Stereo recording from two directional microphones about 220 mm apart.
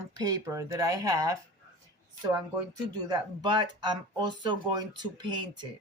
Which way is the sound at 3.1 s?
20° right (ahead or behind).